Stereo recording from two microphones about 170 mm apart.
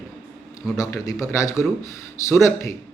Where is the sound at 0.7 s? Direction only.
20° left (ahead or behind).